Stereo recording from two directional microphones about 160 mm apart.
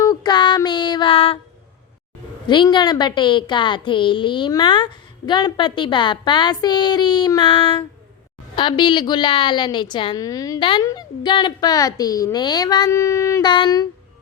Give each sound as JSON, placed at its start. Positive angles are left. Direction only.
{"t": 0.0, "sound": "child singing", "side_deg": 25}
{"t": 2.5, "sound": "a woman's voice", "side_deg": 30}